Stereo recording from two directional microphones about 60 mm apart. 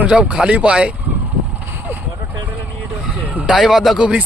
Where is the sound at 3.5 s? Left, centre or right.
Centre.